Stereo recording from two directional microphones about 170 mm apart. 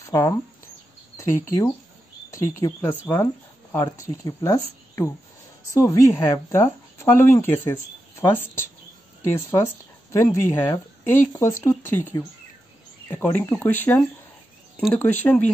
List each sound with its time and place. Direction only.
0.1 s speech: 20° left (ahead or behind)